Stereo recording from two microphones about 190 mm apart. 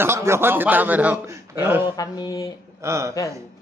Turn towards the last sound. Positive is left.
turn(degrees=-15)  # may be behind; listen again after turning